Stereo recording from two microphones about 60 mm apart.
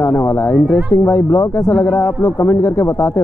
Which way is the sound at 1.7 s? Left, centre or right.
Left.